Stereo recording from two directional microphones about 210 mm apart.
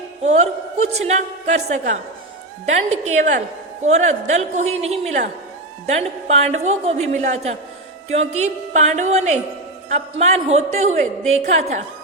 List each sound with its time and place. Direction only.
0.2 s a woman's voice: 30° right (ahead or behind)